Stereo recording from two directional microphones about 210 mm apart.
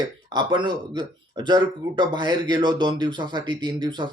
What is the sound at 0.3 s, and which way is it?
Speech, 20° right (ahead or behind).